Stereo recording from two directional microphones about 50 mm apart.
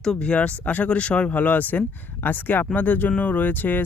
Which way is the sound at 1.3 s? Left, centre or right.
Left.